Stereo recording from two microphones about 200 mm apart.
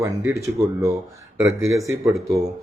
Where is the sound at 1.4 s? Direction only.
15° right (ahead or behind).